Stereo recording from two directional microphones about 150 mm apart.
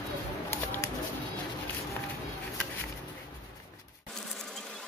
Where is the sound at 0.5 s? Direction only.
15° left (ahead or behind).